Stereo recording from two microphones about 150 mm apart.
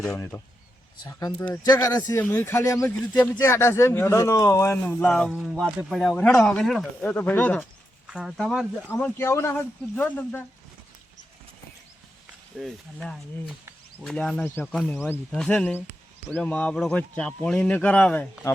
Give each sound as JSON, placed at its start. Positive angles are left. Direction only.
{"t": 0.2, "sound": "speech", "side_deg": 20}
{"t": 1.6, "sound": "speech", "side_deg": 25}
{"t": 2.0, "sound": "speech", "side_deg": 15}
{"t": 8.0, "sound": "speech", "side_deg": -5}
{"t": 8.9, "sound": "speech", "side_deg": 10}
{"t": 12.5, "sound": "speech", "side_deg": 5}